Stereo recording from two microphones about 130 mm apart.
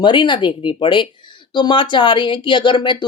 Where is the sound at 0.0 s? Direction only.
40° left (ahead or behind).